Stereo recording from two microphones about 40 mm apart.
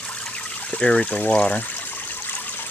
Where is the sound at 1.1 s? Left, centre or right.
Left.